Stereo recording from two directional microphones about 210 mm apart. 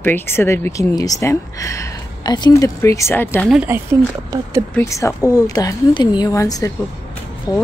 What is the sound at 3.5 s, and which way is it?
Speech, 10° right (ahead or behind).